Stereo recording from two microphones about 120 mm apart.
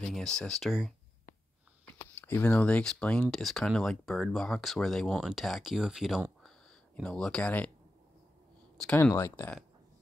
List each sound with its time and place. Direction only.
0.1 s speech: 5° left (ahead or behind)
1.9 s speech: 20° left (ahead or behind); by 6.2 s 5° right (ahead or behind)
7.0 s speech: 5° left (ahead or behind)
8.9 s speech: 20° left (ahead or behind)